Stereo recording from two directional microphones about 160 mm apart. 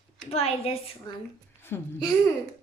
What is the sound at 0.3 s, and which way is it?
Speech, 40° left (ahead or behind).